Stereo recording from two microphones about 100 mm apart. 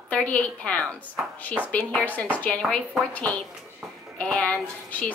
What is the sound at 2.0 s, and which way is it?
A woman's voice, 15° left (ahead or behind).